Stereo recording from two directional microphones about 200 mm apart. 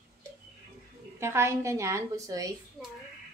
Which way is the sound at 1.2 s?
15° right (ahead or behind).